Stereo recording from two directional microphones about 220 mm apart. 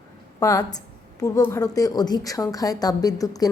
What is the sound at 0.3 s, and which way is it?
A woman's voice, 15° left (ahead or behind).